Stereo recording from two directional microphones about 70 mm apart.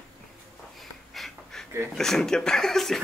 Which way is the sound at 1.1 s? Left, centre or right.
Centre.